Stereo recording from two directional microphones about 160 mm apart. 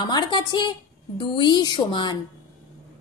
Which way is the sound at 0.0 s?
30° left (ahead or behind).